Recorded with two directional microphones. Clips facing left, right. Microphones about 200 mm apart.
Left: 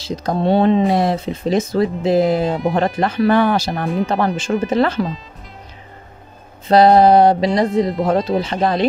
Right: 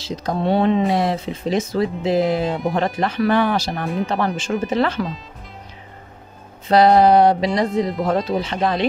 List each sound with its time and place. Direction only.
0.2 s speech: 40° left (ahead or behind)
6.7 s speech: 35° left (ahead or behind)